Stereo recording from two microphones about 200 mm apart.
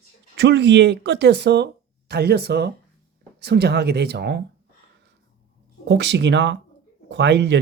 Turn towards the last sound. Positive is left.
turn(degrees=-60)  # may be behind; listen again after turning